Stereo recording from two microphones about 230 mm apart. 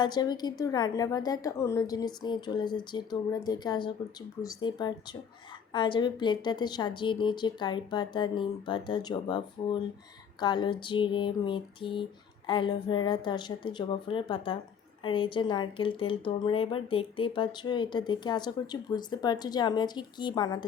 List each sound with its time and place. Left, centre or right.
0.0 s a woman's voice: centre
10.4 s a woman's voice: centre